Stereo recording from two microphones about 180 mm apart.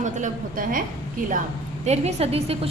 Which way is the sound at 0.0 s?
45° right (ahead or behind).